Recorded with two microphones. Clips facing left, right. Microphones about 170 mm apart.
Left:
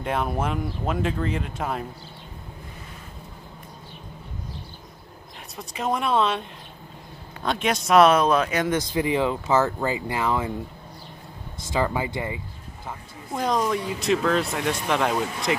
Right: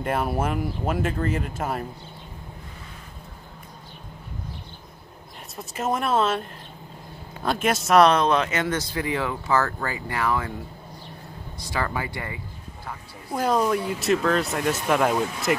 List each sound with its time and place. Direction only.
0.0 s speech: 5° right (ahead or behind)
5.6 s speech: 5° right (ahead or behind)
7.4 s speech: 5° right (ahead or behind); by 10.5 s 20° left (ahead or behind)
11.7 s speech: 20° left (ahead or behind)
13.3 s speech: 5° right (ahead or behind)